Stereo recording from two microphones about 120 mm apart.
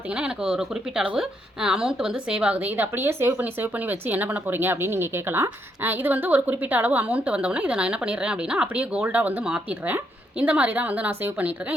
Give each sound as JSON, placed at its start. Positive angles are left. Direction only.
{"t": 0.1, "sound": "speech", "side_deg": -5}